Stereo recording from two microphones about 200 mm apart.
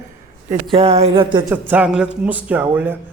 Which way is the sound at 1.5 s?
10° right (ahead or behind).